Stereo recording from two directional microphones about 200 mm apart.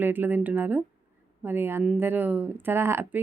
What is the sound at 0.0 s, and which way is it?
Speech, 10° right (ahead or behind).